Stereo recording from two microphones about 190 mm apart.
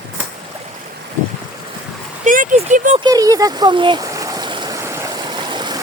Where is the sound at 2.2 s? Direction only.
45° right (ahead or behind).